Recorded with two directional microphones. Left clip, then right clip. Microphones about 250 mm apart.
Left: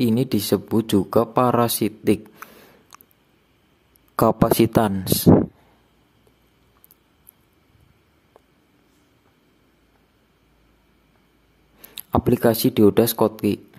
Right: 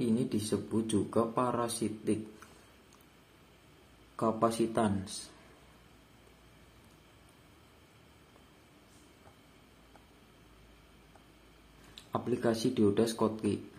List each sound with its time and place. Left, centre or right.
0.0 s speech: left
4.2 s speech: left
11.9 s speech: left